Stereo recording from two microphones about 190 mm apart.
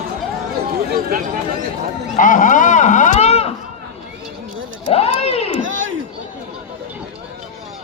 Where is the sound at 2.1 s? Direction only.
40° left (ahead or behind).